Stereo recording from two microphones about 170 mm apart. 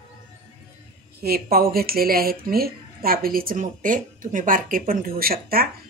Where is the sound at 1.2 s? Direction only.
65° right (ahead or behind).